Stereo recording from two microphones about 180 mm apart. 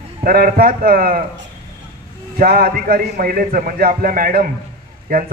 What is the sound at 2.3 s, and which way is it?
A man's voice, 55° right (ahead or behind).